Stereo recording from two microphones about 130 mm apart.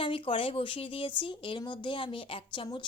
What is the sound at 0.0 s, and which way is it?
A woman's voice, 40° left (ahead or behind).